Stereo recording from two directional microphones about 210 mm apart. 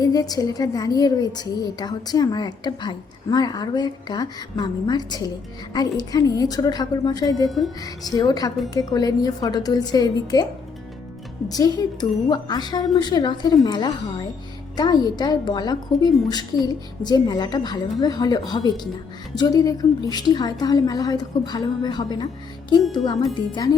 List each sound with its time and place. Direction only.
0.0 s a woman's voice: 15° left (ahead or behind)
11.4 s a woman's voice: 20° left (ahead or behind)